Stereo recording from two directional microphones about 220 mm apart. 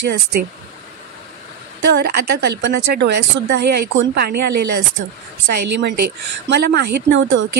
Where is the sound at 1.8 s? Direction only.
45° right (ahead or behind).